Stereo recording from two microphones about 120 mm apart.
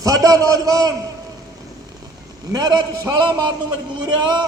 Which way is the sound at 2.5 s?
35° right (ahead or behind).